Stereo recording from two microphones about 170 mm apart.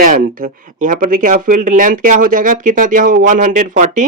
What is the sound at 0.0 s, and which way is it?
Speech, 50° right (ahead or behind).